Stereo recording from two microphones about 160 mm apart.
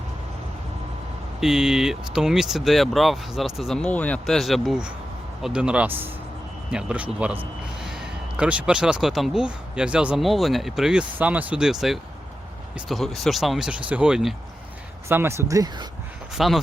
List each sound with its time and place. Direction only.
1.4 s speech: 5° right (ahead or behind)
8.4 s speech: 5° right (ahead or behind)
15.1 s speech: 15° right (ahead or behind)
16.4 s speech: centre (ahead or behind)